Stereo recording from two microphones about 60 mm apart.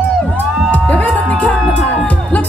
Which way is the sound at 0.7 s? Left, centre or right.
Left.